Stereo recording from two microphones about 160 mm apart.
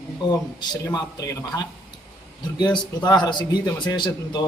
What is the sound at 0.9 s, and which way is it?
A man's voice, 25° left (ahead or behind).